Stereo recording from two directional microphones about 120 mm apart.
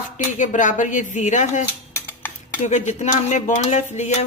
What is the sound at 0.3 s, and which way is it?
Speech, 90° left.